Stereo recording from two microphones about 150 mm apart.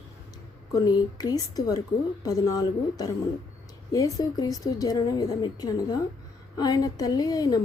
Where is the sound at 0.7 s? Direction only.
25° left (ahead or behind).